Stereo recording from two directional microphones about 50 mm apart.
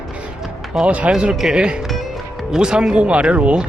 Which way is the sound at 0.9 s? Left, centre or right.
Right.